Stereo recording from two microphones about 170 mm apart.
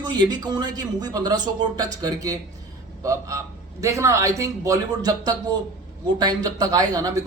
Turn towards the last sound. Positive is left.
turn(degrees=-20)  # may be behind; listen again after turning